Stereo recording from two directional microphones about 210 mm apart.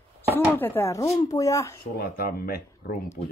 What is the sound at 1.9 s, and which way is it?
Speech, 45° left (ahead or behind).